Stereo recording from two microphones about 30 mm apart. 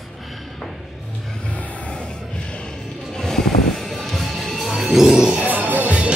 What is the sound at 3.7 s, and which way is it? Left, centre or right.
Music, centre.